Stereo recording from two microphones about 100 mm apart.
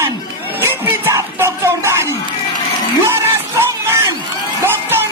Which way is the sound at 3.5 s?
30° right (ahead or behind).